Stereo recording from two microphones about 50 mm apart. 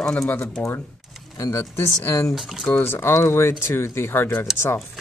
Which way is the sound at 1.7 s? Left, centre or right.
Left.